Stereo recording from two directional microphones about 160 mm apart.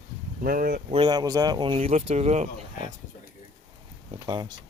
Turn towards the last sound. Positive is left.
turn(degrees=-30)  # may be behind; listen again after turning